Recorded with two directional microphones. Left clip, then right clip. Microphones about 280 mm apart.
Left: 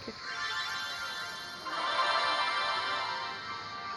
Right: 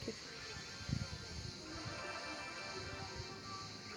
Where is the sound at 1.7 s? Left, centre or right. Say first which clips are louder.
Left 18 dB; left.